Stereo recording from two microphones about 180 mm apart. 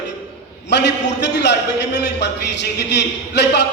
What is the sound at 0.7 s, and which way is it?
A man's voice, 70° left (ahead or behind).